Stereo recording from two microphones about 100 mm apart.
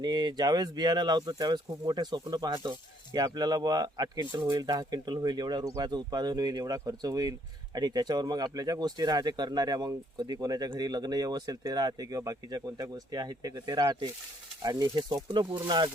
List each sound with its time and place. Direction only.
0.0 s speech: 45° right (ahead or behind)